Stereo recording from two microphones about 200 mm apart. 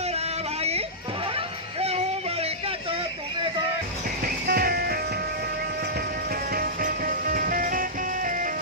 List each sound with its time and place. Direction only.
4.4 s music: 50° right (ahead or behind)
6.5 s music: 45° right (ahead or behind)